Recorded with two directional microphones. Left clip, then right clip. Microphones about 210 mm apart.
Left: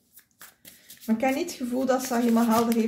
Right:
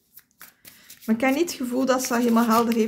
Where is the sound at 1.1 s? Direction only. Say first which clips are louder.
Right 3 dB; 45° right (ahead or behind).